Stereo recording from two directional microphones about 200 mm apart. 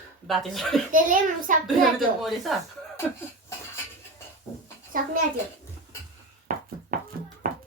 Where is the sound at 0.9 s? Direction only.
40° right (ahead or behind).